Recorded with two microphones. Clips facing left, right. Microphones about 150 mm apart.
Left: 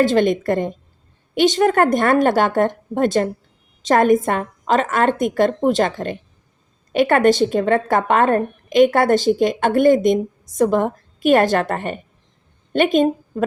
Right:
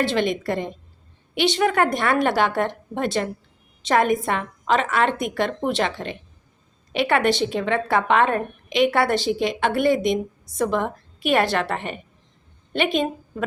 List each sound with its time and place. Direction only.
0.0 s a woman's voice: 45° left (ahead or behind)